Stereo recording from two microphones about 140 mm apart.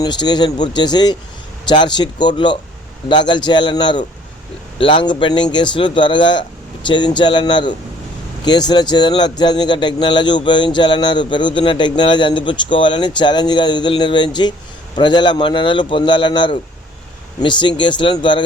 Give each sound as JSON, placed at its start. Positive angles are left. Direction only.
{"t": 0.0, "sound": "speech", "side_deg": 30}